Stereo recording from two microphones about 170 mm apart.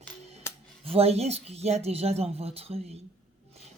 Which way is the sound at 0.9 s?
35° right (ahead or behind).